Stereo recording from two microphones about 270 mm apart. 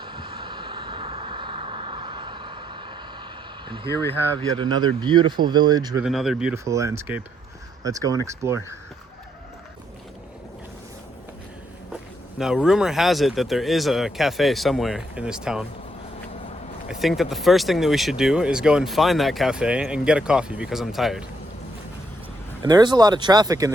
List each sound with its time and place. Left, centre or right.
0.0 s vehicle: centre
3.8 s speech: centre
4.4 s speech: centre
6.0 s speech: centre
12.4 s speech: centre
16.9 s speech: centre
22.6 s speech: centre